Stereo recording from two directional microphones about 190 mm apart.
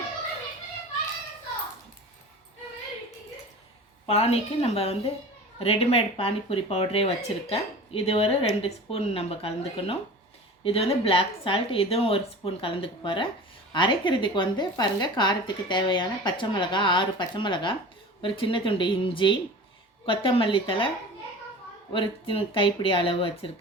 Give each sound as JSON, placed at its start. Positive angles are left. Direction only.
{"t": 4.0, "sound": "speech", "side_deg": 30}
{"t": 21.9, "sound": "speech", "side_deg": 30}